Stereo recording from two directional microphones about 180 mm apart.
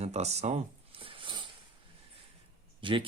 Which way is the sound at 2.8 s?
30° right (ahead or behind).